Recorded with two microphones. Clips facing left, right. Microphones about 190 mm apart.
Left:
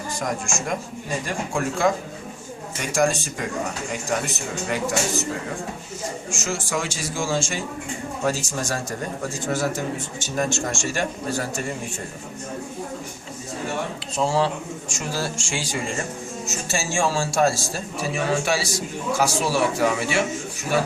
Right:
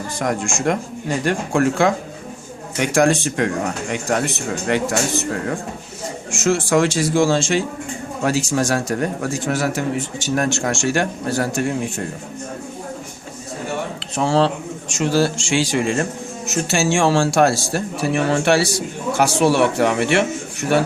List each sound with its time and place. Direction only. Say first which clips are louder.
0.2 s speech: right 7 dB; 65° right (ahead or behind)
6.4 s speech: right 11 dB; 65° right (ahead or behind)
14.2 s speech: right 4 dB; 70° right (ahead or behind)